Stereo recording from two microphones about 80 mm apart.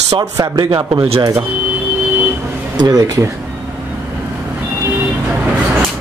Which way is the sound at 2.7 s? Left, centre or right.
Right.